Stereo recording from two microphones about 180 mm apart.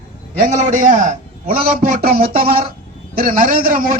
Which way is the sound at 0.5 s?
45° right (ahead or behind).